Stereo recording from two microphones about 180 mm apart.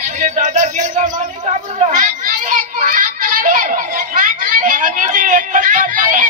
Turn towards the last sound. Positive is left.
turn(degrees=-45)  # may be behind; listen again after turning